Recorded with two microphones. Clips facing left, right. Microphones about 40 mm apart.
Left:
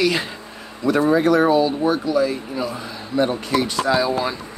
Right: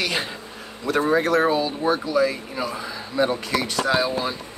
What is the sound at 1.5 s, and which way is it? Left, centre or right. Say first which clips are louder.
Speech: left 4 dB; centre.